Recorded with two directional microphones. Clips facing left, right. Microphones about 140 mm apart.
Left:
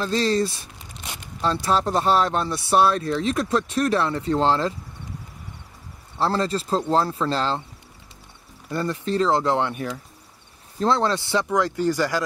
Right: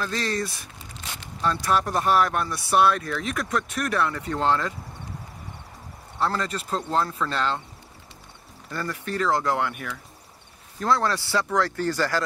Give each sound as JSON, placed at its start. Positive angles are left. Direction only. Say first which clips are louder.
{"t": 0.0, "sound": "speech", "louder": "left 6 dB", "side_deg": 25}
{"t": 6.1, "sound": "speech", "louder": "left 4 dB", "side_deg": 30}
{"t": 8.6, "sound": "speech", "louder": "left 6 dB", "side_deg": 25}